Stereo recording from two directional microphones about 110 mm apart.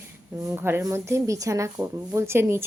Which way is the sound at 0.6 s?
20° right (ahead or behind).